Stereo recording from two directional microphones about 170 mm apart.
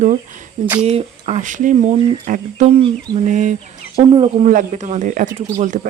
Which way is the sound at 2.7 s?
30° right (ahead or behind).